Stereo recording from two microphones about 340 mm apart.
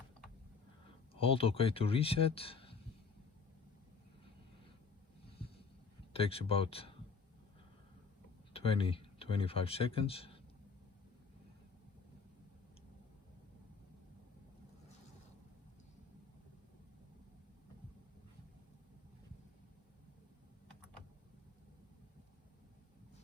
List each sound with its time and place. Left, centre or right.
0.9 s speech: centre
6.1 s speech: centre
8.5 s speech: centre